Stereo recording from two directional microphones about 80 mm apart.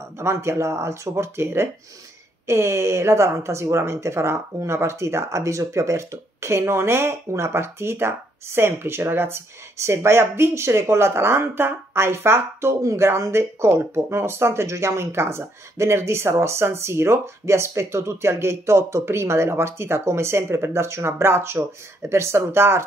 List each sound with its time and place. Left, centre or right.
0.2 s speech: right